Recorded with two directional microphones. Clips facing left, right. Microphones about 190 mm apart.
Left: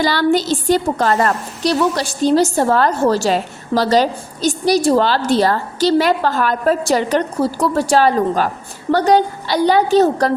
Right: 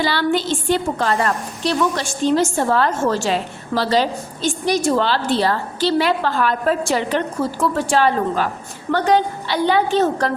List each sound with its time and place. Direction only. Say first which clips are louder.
0.0 s a woman's voice: left 4 dB; 40° left (ahead or behind)